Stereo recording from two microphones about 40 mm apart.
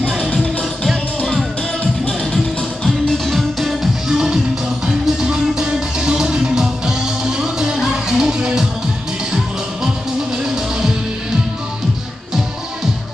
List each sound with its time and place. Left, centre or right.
0.0 s music: left
2.3 s music: centre
3.3 s music: centre
4.1 s music: centre
10.4 s music: centre